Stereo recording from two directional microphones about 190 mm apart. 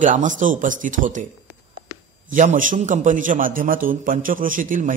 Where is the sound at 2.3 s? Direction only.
45° right (ahead or behind).